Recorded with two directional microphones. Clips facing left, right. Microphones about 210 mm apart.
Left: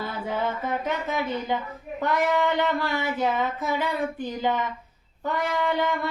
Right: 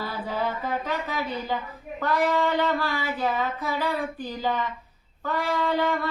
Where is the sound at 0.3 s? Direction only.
20° left (ahead or behind).